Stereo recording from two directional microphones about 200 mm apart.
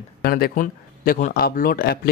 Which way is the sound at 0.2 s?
45° left (ahead or behind).